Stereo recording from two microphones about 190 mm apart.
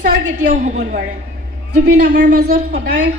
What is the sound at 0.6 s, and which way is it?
Speech, 40° right (ahead or behind).